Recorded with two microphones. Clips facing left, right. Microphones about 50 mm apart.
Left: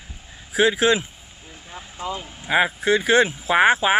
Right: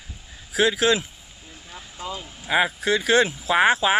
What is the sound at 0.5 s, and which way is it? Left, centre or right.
Speech, centre.